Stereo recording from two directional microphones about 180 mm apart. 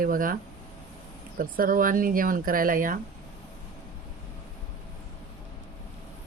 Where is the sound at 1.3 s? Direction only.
50° right (ahead or behind).